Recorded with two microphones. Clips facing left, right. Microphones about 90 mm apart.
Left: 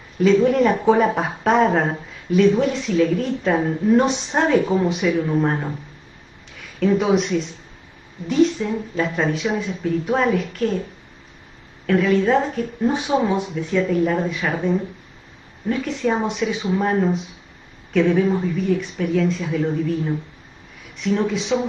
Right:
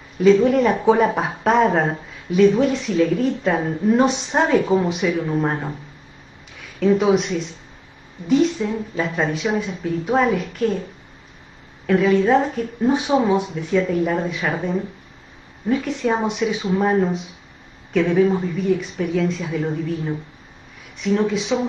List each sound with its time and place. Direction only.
0.2 s speech: centre (ahead or behind)
6.8 s speech: centre (ahead or behind)
8.3 s speech: 5° right (ahead or behind)
11.8 s a woman's voice: centre (ahead or behind)
13.7 s speech: centre (ahead or behind)
15.7 s speech: 10° right (ahead or behind)